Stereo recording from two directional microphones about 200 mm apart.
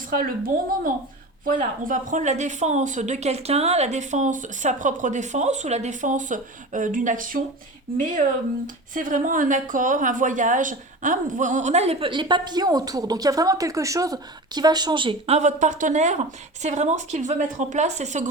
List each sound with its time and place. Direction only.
0.1 s a woman's voice: 45° right (ahead or behind)